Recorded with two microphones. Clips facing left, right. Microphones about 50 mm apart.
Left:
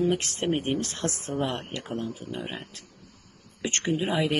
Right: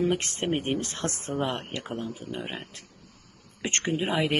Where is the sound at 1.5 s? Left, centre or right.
Centre.